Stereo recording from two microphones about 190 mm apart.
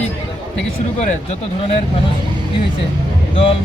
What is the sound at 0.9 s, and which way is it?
Speech, 35° left (ahead or behind).